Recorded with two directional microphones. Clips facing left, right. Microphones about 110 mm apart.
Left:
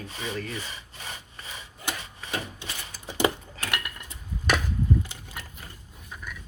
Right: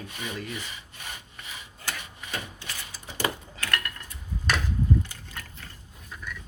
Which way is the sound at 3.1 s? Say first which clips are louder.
Left 5 dB; 20° left (ahead or behind).